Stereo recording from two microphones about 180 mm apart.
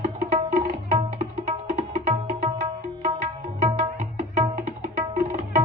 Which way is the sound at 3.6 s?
40° right (ahead or behind).